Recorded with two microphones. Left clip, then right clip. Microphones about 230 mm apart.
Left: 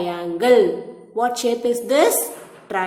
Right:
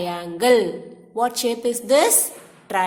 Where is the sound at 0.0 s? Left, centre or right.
Right.